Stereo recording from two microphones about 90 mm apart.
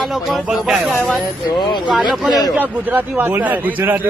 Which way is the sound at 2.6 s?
20° right (ahead or behind).